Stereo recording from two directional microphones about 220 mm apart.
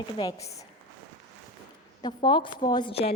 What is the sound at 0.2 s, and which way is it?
Speech, 25° left (ahead or behind).